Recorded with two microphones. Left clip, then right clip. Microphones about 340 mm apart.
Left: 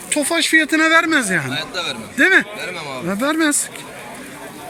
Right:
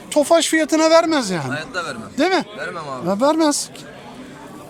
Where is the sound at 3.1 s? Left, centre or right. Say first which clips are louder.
Right 2 dB; centre.